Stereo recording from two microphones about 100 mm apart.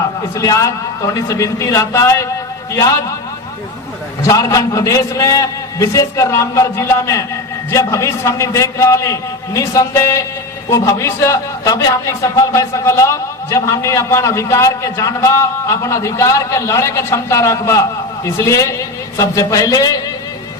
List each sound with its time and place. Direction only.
0.3 s a man's voice: 30° left (ahead or behind)
4.2 s a man's voice: 35° left (ahead or behind)